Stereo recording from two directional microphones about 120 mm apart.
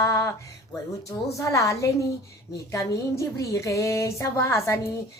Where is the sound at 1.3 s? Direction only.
25° left (ahead or behind).